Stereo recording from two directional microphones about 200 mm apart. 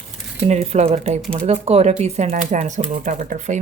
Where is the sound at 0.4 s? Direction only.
30° right (ahead or behind).